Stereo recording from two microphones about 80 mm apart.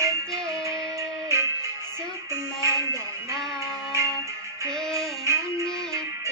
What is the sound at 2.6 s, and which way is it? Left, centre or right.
Music, right.